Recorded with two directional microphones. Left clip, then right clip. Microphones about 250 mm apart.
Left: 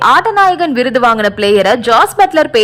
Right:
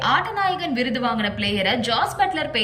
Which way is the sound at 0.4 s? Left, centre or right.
Centre.